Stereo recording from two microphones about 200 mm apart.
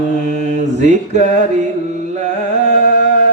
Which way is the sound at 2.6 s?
60° left (ahead or behind).